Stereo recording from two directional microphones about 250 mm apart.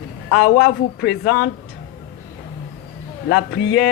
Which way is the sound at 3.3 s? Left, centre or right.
Left.